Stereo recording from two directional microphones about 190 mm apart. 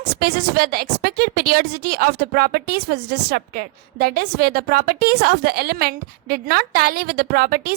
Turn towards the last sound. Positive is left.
turn(degrees=-50)  # may be behind; listen again after turning